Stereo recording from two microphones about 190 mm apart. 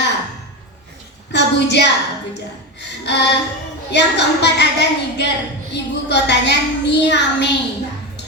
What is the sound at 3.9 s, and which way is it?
Child singing, 65° left (ahead or behind).